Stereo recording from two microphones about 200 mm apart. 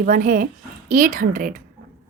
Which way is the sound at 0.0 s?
40° right (ahead or behind).